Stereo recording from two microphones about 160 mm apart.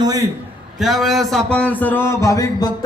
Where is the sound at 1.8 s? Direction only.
15° left (ahead or behind).